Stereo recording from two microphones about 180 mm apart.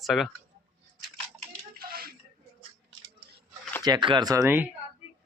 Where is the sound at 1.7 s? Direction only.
55° right (ahead or behind).